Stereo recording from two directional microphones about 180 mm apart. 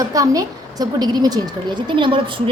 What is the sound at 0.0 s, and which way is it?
A woman's voice, 20° right (ahead or behind).